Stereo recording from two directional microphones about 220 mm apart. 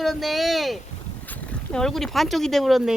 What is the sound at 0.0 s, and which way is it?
Speech, centre (ahead or behind).